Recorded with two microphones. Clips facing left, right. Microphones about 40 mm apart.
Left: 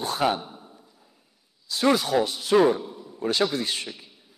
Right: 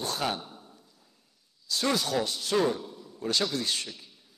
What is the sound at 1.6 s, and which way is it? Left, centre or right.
A man's voice, centre.